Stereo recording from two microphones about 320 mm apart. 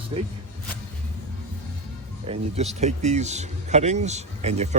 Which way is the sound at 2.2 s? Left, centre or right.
Centre.